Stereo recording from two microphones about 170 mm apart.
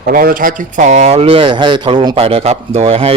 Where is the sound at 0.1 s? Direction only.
55° right (ahead or behind).